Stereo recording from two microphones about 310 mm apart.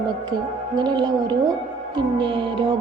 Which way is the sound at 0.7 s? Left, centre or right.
Centre.